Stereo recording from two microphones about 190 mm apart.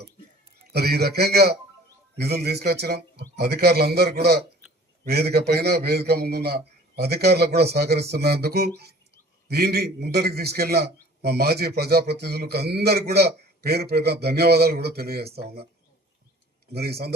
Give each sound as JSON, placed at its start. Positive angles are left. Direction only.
{"t": 0.7, "sound": "a man's voice", "side_deg": -55}
{"t": 16.7, "sound": "a man's voice", "side_deg": -55}